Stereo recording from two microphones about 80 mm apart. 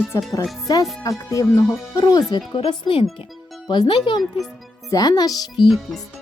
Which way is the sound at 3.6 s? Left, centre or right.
Left.